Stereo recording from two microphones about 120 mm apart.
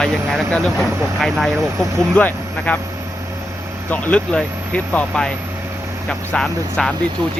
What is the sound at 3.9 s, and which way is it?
Speech, 10° left (ahead or behind).